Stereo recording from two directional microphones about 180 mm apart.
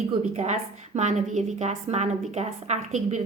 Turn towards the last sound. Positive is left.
turn(degrees=-40)  # may be behind; listen again after turning